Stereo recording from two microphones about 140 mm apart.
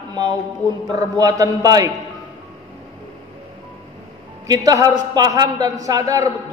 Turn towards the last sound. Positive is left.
turn(degrees=-25)  # may be behind; listen again after turning